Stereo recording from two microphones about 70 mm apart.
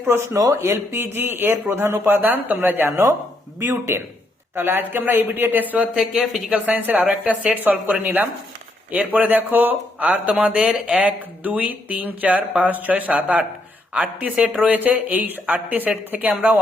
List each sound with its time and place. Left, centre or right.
0.0 s speech: right; by 6.1 s centre
6.1 s speech: centre
6.5 s speech: right